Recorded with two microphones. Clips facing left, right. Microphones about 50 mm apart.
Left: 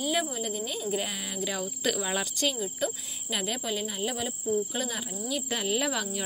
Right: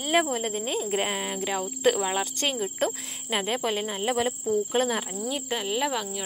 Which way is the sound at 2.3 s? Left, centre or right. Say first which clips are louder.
Right 3 dB; right.